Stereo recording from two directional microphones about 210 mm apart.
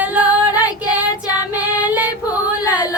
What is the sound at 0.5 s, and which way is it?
Child singing, 15° left (ahead or behind).